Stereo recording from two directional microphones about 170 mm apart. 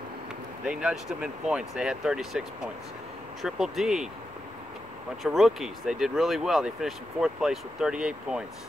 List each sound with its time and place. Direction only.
0.7 s speech: 5° right (ahead or behind)
5.2 s speech: centre (ahead or behind)